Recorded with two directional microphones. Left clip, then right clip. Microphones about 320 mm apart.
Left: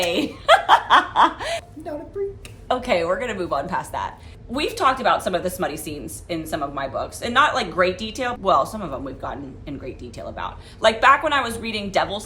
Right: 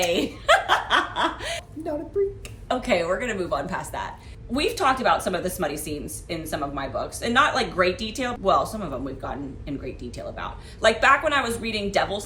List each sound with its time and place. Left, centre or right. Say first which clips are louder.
0.1 s snicker: left 3 dB; centre
2.6 s a woman's voice: left 2 dB; centre